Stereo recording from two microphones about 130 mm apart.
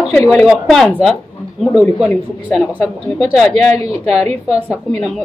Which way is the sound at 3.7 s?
55° right (ahead or behind).